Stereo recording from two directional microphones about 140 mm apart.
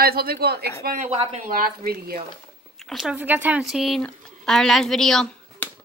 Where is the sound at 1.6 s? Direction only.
90° right.